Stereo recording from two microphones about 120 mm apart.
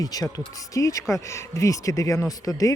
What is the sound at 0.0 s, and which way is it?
Speech, 30° left (ahead or behind).